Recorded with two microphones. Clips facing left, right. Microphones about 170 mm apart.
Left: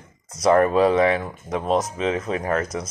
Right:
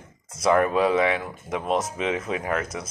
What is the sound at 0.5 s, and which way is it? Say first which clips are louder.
Speech: left 4 dB; 30° left (ahead or behind).